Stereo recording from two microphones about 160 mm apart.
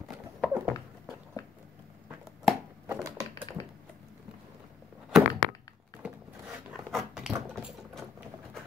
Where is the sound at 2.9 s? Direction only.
20° right (ahead or behind).